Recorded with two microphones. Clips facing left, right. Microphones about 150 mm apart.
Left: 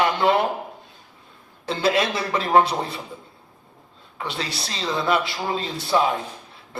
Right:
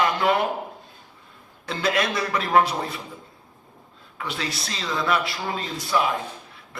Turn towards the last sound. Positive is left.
turn(degrees=30)  # may be behind; listen again after turning